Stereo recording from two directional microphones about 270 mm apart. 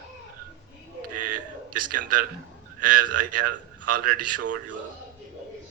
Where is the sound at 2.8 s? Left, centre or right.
Right.